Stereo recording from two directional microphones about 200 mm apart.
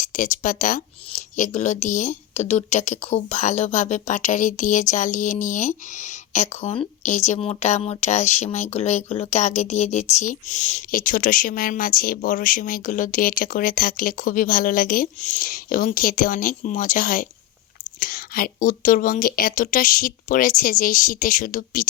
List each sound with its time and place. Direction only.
0.0 s a woman's voice: 40° left (ahead or behind)